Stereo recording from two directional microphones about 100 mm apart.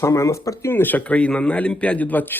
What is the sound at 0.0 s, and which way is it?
Speech, 30° left (ahead or behind).